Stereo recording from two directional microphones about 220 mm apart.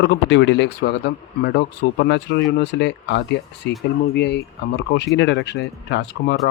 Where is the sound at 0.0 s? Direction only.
50° left (ahead or behind).